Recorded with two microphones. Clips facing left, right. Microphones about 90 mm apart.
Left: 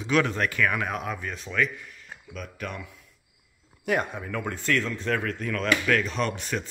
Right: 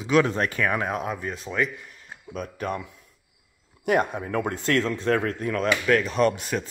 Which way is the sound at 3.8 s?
50° right (ahead or behind).